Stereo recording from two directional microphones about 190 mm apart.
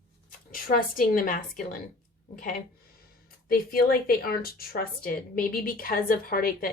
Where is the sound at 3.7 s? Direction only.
50° left (ahead or behind).